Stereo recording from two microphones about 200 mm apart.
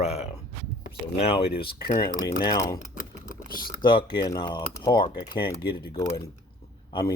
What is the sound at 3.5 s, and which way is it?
Speech, 45° left (ahead or behind).